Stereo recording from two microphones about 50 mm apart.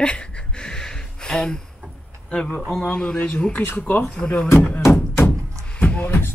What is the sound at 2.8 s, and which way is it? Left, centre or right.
Speech, left.